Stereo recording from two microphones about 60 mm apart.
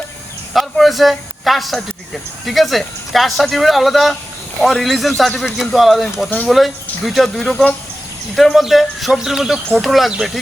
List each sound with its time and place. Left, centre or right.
0.5 s a man's voice: centre
7.5 s speech: left
8.4 s a man's voice: centre